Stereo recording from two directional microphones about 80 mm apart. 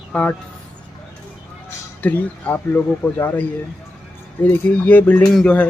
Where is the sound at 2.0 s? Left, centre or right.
Centre.